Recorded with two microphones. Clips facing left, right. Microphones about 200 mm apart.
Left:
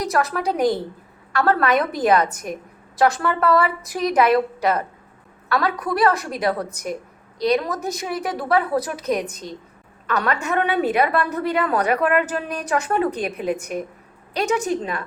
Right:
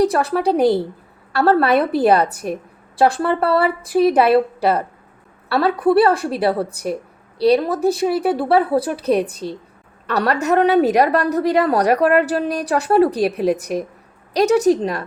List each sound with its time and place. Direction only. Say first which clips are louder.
0.0 s a woman's voice: right 6 dB; 30° right (ahead or behind)